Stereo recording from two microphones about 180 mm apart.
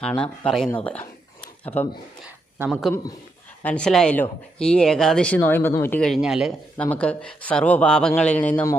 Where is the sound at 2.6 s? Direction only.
Centre (ahead or behind).